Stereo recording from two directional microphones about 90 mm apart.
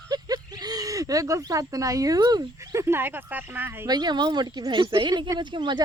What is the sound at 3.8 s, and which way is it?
Speech, 50° right (ahead or behind).